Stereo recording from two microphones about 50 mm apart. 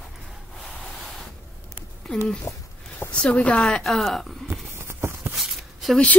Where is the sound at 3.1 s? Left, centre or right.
Left.